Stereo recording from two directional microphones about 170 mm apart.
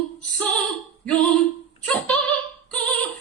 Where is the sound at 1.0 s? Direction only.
5° left (ahead or behind).